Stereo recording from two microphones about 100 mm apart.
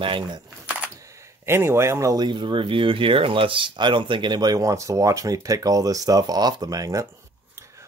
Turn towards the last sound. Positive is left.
turn(degrees=-35)  # may be behind; listen again after turning